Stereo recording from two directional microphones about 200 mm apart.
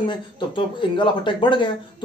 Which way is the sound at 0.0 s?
25° left (ahead or behind).